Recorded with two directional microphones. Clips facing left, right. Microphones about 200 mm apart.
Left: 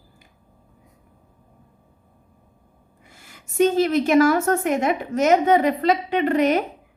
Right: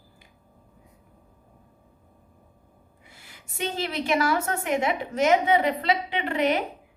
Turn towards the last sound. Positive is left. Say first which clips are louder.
# left 6 dB
turn(degrees=45)  # may be behind; listen again after turning